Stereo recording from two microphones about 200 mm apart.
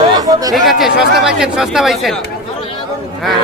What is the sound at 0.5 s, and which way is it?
Speech, centre (ahead or behind).